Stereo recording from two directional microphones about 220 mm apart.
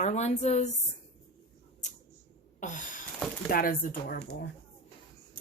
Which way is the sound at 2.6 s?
35° left (ahead or behind).